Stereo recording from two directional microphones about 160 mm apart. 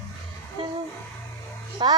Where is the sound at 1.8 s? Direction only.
30° right (ahead or behind).